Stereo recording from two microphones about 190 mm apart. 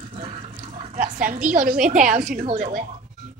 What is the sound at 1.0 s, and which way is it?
A woman's voice, 45° right (ahead or behind).